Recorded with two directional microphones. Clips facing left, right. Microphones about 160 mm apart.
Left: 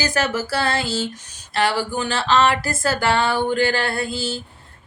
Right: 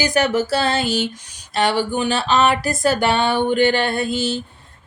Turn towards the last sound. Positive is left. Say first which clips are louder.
# right 4 dB
turn(degrees=-20)  # may be behind; listen again after turning